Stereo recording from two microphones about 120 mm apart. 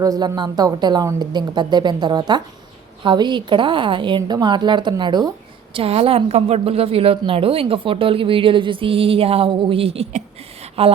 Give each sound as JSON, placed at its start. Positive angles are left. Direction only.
{"t": 0.0, "sound": "a woman's voice", "side_deg": -30}
{"t": 5.7, "sound": "a woman's voice", "side_deg": -55}
{"t": 10.8, "sound": "a woman's voice", "side_deg": -55}